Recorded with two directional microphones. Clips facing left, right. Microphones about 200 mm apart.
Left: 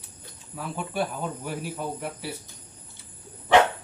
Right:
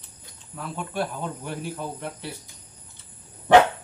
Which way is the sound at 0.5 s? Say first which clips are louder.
Even; 5° left (ahead or behind).